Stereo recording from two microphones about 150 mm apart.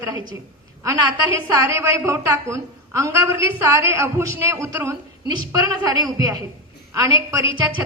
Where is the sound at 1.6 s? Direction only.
20° right (ahead or behind).